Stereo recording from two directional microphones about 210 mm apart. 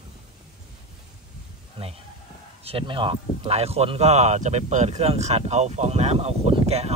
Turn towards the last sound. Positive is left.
turn(degrees=-30)  # may be behind; listen again after turning